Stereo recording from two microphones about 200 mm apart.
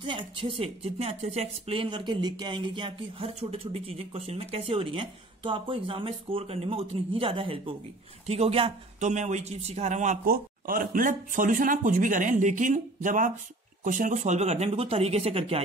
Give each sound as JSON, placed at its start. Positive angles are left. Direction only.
{"t": 0.0, "sound": "speech", "side_deg": -25}